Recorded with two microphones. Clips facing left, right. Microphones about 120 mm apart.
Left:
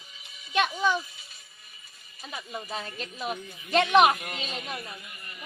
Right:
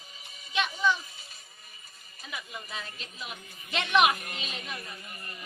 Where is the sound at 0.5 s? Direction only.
45° left (ahead or behind).